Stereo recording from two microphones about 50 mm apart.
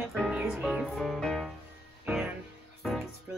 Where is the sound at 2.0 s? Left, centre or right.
Centre.